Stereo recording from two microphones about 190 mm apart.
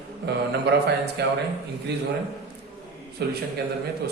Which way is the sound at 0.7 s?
60° right (ahead or behind).